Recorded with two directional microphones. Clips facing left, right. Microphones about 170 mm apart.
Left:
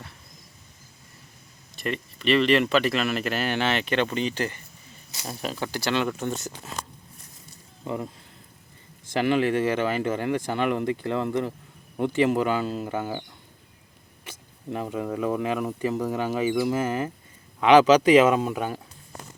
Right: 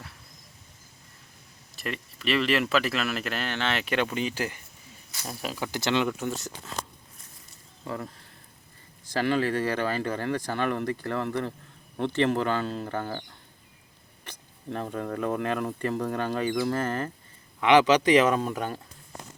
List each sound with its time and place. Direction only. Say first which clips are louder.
1.7 s speech: left 5 dB; centre (ahead or behind)
3.8 s speech: left 2 dB; 5° right (ahead or behind)
5.7 s speech: even; 20° right (ahead or behind)
6.1 s speech: left 2 dB; centre (ahead or behind)
7.9 s speech: left 4 dB; 20° left (ahead or behind)
9.1 s speech: left 3 dB; 15° left (ahead or behind)
14.3 s speech: left 2 dB; 10° left (ahead or behind)